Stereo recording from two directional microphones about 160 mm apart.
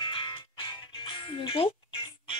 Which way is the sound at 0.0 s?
30° left (ahead or behind).